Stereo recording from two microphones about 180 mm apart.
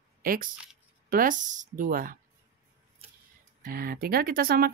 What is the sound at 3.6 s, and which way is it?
Speech, 55° right (ahead or behind).